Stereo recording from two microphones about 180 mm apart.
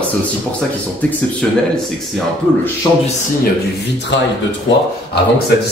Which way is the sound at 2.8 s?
20° left (ahead or behind).